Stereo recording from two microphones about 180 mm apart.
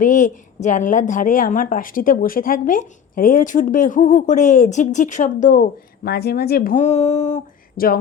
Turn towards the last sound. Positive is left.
turn(degrees=50)  # may be behind; listen again after turning